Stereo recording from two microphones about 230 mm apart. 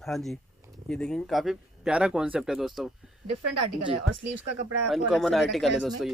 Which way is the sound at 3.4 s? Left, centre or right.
Right.